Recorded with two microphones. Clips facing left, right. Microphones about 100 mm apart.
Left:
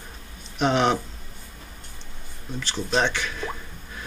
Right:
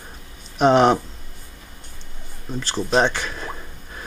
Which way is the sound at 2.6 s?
40° right (ahead or behind).